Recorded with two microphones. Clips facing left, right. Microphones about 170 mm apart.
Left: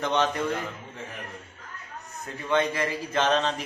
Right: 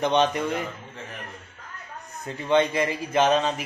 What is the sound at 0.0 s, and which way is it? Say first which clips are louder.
Speech: right 4 dB; 20° right (ahead or behind).